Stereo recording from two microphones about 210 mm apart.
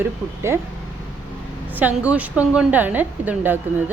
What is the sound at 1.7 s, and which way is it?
A woman's voice, 5° right (ahead or behind).